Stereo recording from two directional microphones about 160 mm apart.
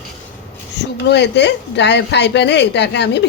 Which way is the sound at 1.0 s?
90° left.